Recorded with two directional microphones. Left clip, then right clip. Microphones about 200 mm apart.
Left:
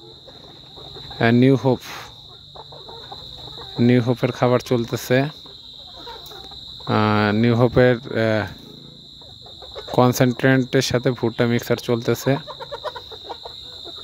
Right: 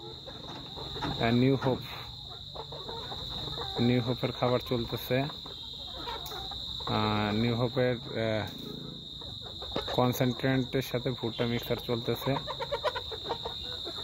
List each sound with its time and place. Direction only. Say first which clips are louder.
1.2 s speech: left 11 dB; 60° left (ahead or behind)
3.8 s speech: left 12 dB; 65° left (ahead or behind)
6.8 s speech: left 11 dB; 65° left (ahead or behind); by 8.5 s 45° left (ahead or behind)
9.9 s speech: left 12 dB; 50° left (ahead or behind)
12.4 s bird: left 2 dB; 10° right (ahead or behind)